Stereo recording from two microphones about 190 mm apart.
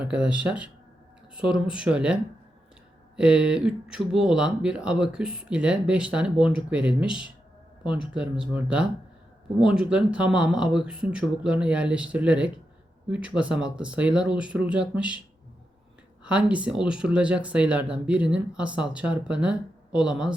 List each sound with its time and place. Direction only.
0.1 s speech: 5° right (ahead or behind)
3.2 s speech: 5° right (ahead or behind)
16.2 s speech: 5° right (ahead or behind)